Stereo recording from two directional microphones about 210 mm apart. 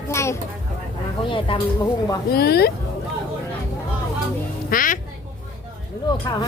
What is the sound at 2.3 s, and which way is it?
Speech, 50° left (ahead or behind).